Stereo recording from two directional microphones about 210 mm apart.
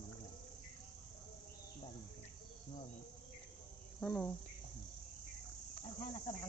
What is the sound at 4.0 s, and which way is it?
Cricket, 5° left (ahead or behind).